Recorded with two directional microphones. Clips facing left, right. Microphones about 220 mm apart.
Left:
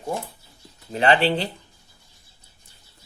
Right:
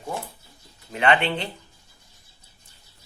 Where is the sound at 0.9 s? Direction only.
35° left (ahead or behind).